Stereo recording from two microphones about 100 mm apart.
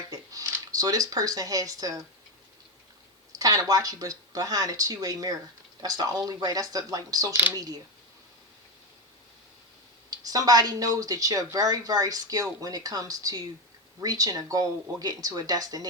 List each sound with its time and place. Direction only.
0.1 s speech: 35° right (ahead or behind)
3.3 s speech: 35° right (ahead or behind)
10.1 s speech: 40° right (ahead or behind)